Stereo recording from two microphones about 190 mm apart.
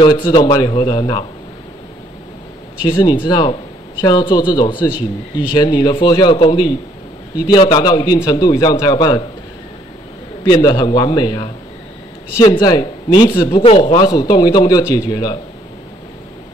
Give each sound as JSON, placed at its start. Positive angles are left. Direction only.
{"t": 0.0, "sound": "a man's voice", "side_deg": 25}
{"t": 2.8, "sound": "a man's voice", "side_deg": 20}
{"t": 10.6, "sound": "a man's voice", "side_deg": 25}